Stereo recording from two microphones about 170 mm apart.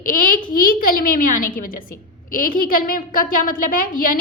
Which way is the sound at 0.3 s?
55° left (ahead or behind).